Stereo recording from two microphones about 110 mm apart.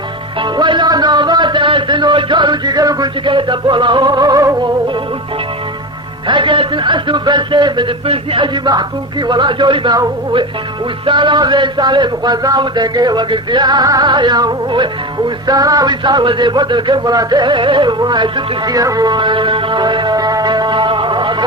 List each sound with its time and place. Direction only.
0.3 s music: 45° right (ahead or behind)
3.2 s a man's voice: 45° right (ahead or behind)
6.2 s a man's voice: 50° right (ahead or behind)
15.4 s a sound: 35° right (ahead or behind)